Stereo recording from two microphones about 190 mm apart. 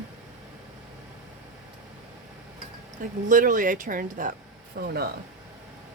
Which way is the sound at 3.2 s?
45° right (ahead or behind).